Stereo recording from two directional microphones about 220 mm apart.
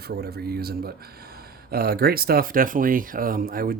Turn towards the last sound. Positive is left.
turn(degrees=-40)  # may be behind; listen again after turning